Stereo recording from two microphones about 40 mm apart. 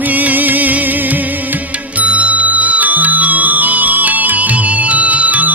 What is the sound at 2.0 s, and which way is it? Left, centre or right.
Music, right.